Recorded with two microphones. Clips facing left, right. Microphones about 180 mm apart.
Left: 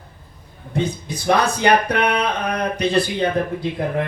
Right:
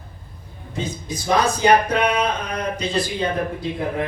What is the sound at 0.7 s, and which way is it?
A man's voice, 60° left (ahead or behind).